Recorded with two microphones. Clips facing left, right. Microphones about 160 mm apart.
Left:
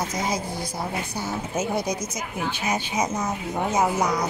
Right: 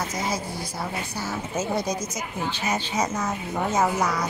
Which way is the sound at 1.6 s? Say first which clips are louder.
Even; 10° left (ahead or behind).